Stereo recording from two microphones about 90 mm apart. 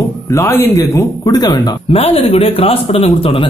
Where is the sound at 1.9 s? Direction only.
90° left.